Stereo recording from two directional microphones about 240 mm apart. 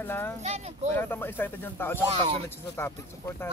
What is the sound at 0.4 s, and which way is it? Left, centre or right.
Speech, right.